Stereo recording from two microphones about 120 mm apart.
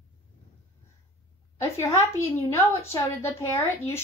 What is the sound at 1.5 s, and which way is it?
A woman's voice, 25° left (ahead or behind).